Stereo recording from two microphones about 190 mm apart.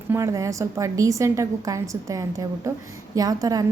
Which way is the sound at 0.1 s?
15° right (ahead or behind).